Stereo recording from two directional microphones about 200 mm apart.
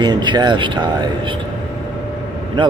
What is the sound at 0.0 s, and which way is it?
Speech, 20° right (ahead or behind).